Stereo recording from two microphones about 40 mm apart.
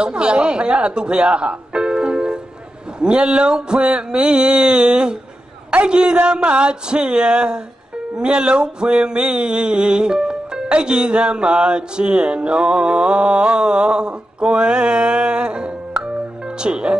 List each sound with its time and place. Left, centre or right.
0.0 s speech: right
3.0 s music: right